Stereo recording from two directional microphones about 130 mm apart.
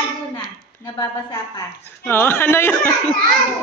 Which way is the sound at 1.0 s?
30° left (ahead or behind).